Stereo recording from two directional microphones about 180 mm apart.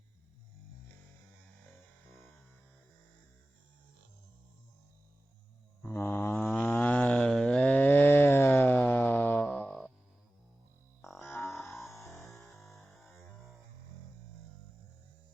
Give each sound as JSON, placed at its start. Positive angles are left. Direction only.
{"t": 5.8, "sound": "a sound", "side_deg": 15}
{"t": 11.0, "sound": "music", "side_deg": 0}
{"t": 11.9, "sound": "music", "side_deg": 15}
{"t": 12.4, "sound": "music", "side_deg": 0}